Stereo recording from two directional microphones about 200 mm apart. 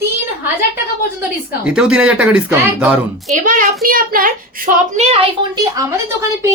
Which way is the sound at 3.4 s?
45° right (ahead or behind).